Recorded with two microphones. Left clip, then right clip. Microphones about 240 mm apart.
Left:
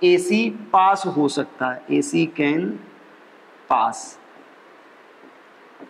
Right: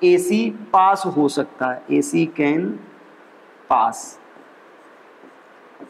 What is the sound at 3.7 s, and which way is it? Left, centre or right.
Speech, left.